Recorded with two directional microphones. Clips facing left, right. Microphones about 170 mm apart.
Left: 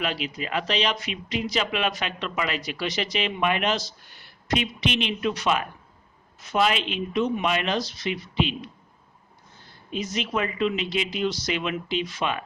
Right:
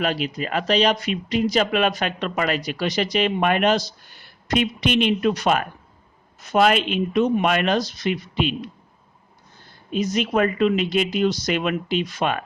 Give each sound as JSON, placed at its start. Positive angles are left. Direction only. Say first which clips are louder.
{"t": 0.0, "sound": "speech", "louder": "right 5 dB", "side_deg": -45}
{"t": 9.9, "sound": "speech", "louder": "right 6 dB", "side_deg": -40}